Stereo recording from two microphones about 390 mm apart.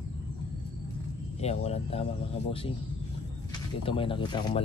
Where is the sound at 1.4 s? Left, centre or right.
Centre.